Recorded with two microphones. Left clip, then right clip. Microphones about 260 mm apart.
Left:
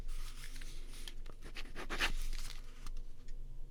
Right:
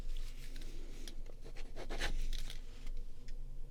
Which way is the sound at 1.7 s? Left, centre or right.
Left.